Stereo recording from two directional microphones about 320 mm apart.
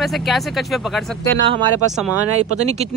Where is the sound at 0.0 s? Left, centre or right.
Centre.